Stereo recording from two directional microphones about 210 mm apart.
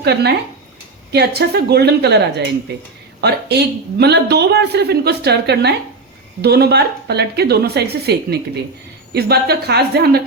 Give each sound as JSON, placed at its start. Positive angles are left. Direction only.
{"t": 0.0, "sound": "speech", "side_deg": -50}